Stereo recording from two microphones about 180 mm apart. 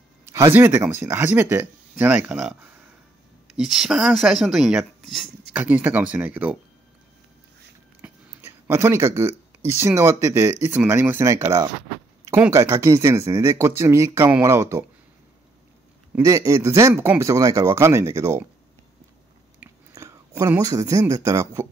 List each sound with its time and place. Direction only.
0.2 s speech: 15° right (ahead or behind)
8.0 s speech: 15° right (ahead or behind)
16.2 s speech: 15° right (ahead or behind)
19.6 s whispering: 15° right (ahead or behind)
20.6 s speech: 20° right (ahead or behind)